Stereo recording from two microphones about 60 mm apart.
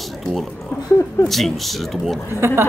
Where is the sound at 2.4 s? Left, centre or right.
Right.